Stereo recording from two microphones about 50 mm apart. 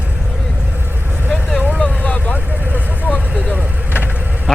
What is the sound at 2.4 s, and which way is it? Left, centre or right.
Vehicle, right.